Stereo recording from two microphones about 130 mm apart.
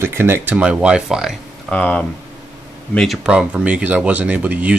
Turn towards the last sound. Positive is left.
turn(degrees=-10)  # may be behind; listen again after turning